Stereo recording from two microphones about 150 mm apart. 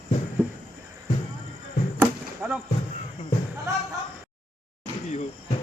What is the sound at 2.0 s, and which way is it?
Chop, 10° right (ahead or behind).